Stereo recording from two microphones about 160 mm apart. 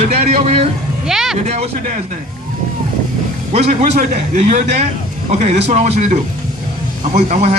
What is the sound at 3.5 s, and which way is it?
A man's voice, 45° right (ahead or behind).